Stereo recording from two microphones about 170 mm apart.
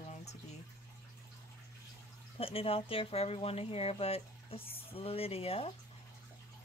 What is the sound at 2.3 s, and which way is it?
Speech, 35° left (ahead or behind).